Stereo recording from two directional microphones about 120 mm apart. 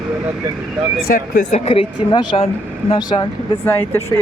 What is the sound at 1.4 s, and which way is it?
Speech, 65° left (ahead or behind).